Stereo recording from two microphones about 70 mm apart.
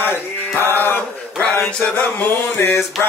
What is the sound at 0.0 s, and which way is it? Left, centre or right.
Mantra, left.